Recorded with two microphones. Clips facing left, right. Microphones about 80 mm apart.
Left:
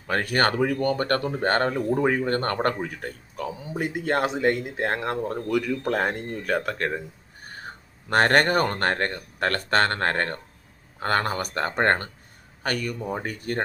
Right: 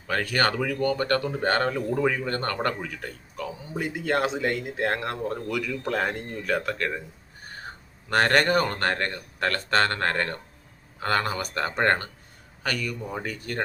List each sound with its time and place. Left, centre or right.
0.1 s speech: left
0.8 s speech: left
2.8 s speech: left
3.8 s speech: left
8.1 s speech: left
11.5 s speech: left